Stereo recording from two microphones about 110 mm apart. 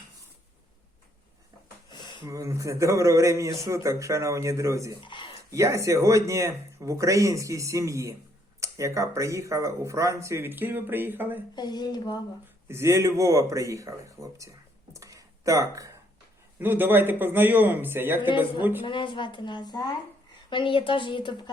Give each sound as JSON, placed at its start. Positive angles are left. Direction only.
{"t": 1.9, "sound": "a sound", "side_deg": 45}
{"t": 2.2, "sound": "speech", "side_deg": -30}
{"t": 5.0, "sound": "a sound", "side_deg": 45}
{"t": 5.5, "sound": "speech", "side_deg": -30}
{"t": 11.5, "sound": "speech", "side_deg": 40}
{"t": 12.6, "sound": "speech", "side_deg": -25}
{"t": 14.9, "sound": "a sound", "side_deg": -30}
{"t": 16.6, "sound": "speech", "side_deg": -20}
{"t": 18.3, "sound": "a woman's voice", "side_deg": 45}